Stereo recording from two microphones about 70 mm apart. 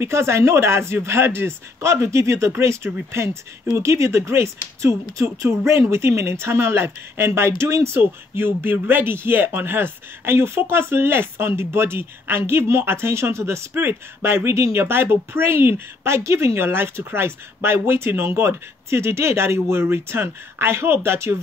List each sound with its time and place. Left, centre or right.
0.0 s speech: right